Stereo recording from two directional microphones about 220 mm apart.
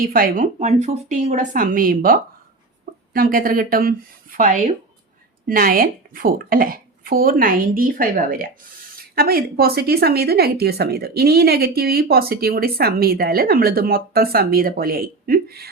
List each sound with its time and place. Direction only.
0.0 s speech: 40° right (ahead or behind)